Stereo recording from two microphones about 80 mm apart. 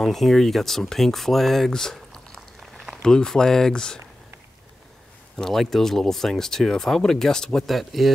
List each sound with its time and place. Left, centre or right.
0.0 s speech: centre
5.4 s speech: centre